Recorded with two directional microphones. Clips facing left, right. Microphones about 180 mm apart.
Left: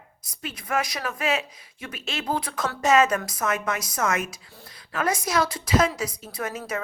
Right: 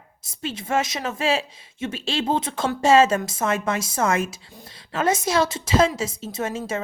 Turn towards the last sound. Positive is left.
turn(degrees=-25)  # may be behind; listen again after turning